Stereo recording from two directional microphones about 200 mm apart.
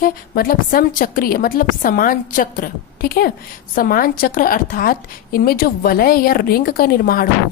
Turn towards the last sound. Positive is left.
turn(degrees=45)  # may be behind; listen again after turning